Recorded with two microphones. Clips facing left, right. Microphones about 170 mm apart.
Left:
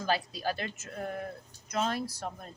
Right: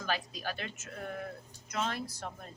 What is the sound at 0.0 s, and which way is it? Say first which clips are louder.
Speech: left 5 dB; 35° left (ahead or behind).